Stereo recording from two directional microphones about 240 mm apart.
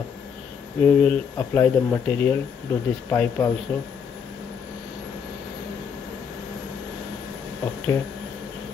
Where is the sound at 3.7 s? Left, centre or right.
Centre.